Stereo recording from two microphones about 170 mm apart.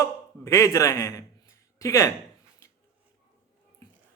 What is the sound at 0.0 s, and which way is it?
A man's voice, 15° left (ahead or behind).